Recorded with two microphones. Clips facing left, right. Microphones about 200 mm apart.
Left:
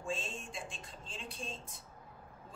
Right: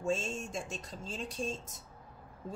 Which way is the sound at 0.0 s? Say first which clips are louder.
Right 7 dB; 45° right (ahead or behind).